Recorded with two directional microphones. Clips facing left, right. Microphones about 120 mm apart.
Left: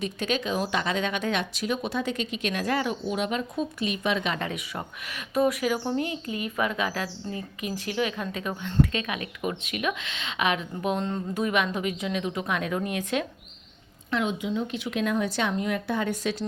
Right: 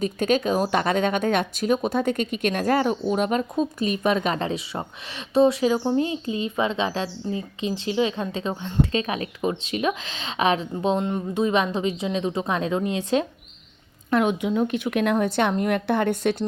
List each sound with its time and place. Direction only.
0.0 s speech: 45° right (ahead or behind)
4.4 s speech: 30° right (ahead or behind)
14.1 s a woman's voice: 55° right (ahead or behind)